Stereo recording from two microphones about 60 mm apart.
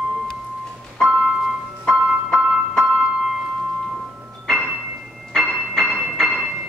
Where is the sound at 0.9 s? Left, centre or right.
Centre.